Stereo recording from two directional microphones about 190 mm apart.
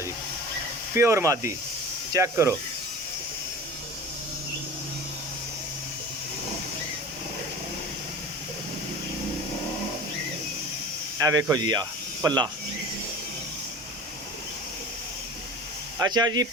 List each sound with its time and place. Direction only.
0.9 s speech: 15° right (ahead or behind)
11.2 s speech: 20° right (ahead or behind)
16.0 s speech: 20° right (ahead or behind)